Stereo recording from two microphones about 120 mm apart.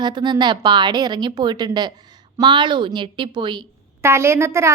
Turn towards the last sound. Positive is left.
turn(degrees=-25)  # may be behind; listen again after turning